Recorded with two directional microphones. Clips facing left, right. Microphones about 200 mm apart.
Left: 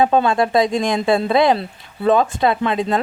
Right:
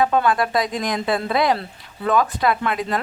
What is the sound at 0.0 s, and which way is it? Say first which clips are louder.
Speech: left 3 dB; 25° left (ahead or behind).